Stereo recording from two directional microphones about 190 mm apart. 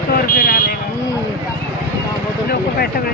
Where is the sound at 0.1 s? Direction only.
50° left (ahead or behind).